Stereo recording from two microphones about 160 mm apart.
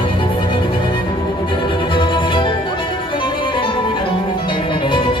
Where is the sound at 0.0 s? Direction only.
30° left (ahead or behind).